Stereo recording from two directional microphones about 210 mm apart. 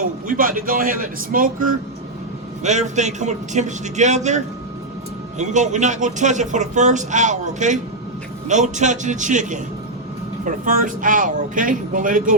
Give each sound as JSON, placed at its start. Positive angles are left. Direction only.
{"t": 0.0, "sound": "a man's voice", "side_deg": -40}